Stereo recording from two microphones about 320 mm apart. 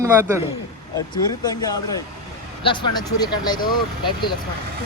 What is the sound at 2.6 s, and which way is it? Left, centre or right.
Speech, centre.